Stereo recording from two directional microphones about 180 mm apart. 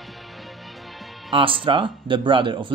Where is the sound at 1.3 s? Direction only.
30° right (ahead or behind).